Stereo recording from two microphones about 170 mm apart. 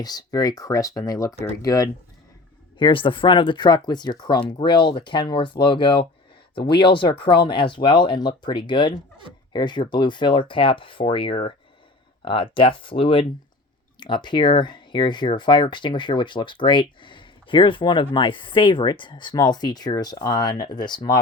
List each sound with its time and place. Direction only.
0.0 s speech: 25° left (ahead or behind)